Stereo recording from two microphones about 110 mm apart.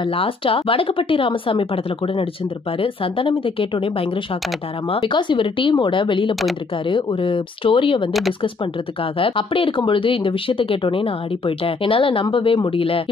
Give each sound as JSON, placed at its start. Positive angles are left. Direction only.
{"t": 0.0, "sound": "speech", "side_deg": 55}
{"t": 2.8, "sound": "speech", "side_deg": 55}
{"t": 8.1, "sound": "speech", "side_deg": 0}
{"t": 9.2, "sound": "speech", "side_deg": 55}